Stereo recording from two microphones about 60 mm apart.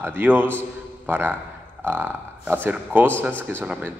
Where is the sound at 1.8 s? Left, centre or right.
Right.